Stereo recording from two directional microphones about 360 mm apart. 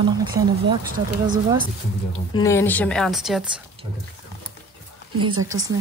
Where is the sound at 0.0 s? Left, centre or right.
Centre.